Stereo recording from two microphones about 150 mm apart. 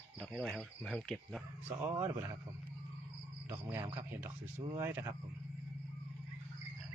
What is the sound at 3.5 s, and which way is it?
Speech, 15° right (ahead or behind).